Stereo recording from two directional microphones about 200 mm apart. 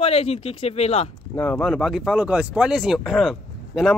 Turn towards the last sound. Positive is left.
turn(degrees=0)  # may be behind; listen again after turning